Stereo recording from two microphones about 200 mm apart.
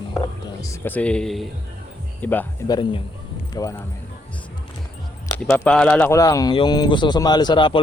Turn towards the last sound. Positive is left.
turn(degrees=25)  # may be behind; listen again after turning